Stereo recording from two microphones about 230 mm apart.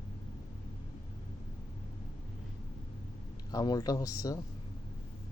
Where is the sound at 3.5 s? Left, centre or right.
Centre.